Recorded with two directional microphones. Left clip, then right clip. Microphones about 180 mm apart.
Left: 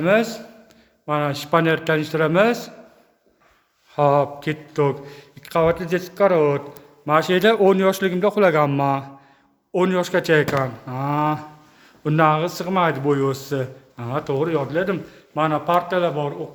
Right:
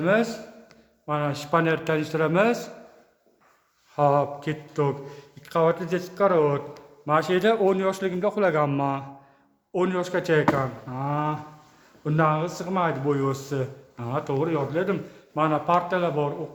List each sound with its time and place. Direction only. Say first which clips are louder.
0.0 s a man's voice: left 4 dB; 30° left (ahead or behind)
3.9 s a man's voice: left 4 dB; 25° left (ahead or behind)